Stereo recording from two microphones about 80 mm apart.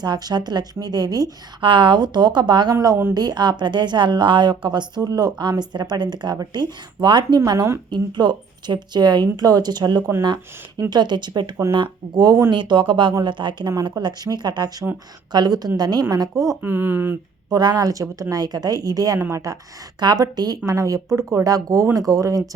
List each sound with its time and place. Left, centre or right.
0.0 s a woman's voice: right
1.6 s a woman's voice: right
7.3 s a woman's voice: right
7.9 s a woman's voice: right
12.5 s a woman's voice: right
14.0 s a woman's voice: right
16.6 s speech: right
17.5 s a woman's voice: right
20.0 s a woman's voice: right
20.7 s a woman's voice: right